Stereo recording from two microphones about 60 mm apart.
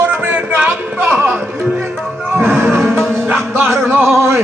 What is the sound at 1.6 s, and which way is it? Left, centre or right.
Music, right.